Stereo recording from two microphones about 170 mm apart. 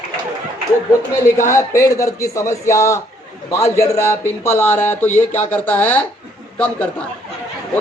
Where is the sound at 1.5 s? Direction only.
15° left (ahead or behind).